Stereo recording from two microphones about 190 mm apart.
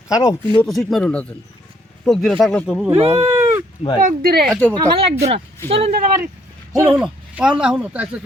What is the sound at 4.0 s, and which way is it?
Speech, 45° right (ahead or behind).